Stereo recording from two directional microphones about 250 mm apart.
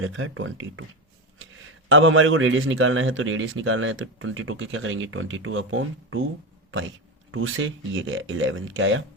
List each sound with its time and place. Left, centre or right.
0.0 s a man's voice: right
7.3 s a man's voice: right